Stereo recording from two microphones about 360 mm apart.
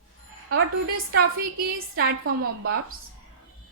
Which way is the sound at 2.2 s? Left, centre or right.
Right.